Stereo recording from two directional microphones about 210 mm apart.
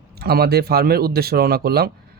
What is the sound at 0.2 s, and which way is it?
Speech, 45° right (ahead or behind).